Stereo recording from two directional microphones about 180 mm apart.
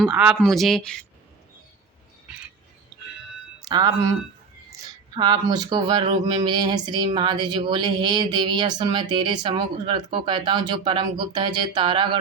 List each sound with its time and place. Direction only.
0.0 s speech: 5° right (ahead or behind)
2.3 s bird: 5° right (ahead or behind)
2.9 s music: 15° right (ahead or behind)
3.7 s speech: 20° right (ahead or behind)
5.1 s speech: 25° right (ahead or behind)